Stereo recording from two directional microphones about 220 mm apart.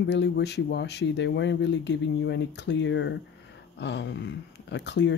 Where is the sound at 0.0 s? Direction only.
50° left (ahead or behind).